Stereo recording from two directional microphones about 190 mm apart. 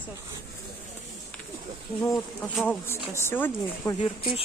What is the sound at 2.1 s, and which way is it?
A woman's voice, 5° left (ahead or behind).